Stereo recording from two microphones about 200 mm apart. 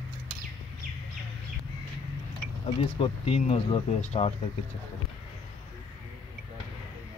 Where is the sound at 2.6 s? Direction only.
30° left (ahead or behind).